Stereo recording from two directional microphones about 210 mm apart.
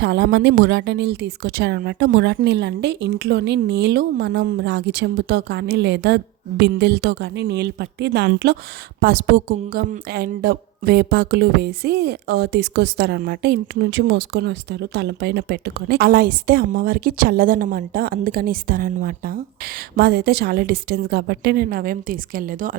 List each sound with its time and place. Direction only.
0.0 s a woman's voice: 50° right (ahead or behind)